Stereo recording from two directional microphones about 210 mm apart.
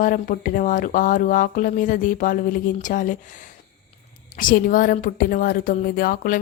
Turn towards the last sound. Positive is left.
turn(degrees=40)  # may be behind; listen again after turning